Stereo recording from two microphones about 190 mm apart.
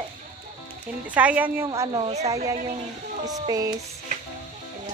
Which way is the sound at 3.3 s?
20° right (ahead or behind).